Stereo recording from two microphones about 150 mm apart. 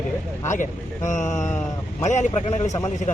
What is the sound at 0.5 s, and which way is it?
Speech, 55° left (ahead or behind).